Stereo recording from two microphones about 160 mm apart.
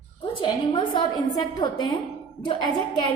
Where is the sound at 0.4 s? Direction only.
30° left (ahead or behind).